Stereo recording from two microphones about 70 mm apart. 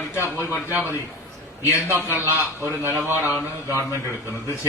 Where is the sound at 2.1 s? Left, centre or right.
Right.